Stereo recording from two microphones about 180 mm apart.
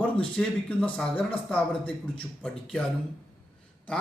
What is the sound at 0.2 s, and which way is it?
Speech, 5° left (ahead or behind).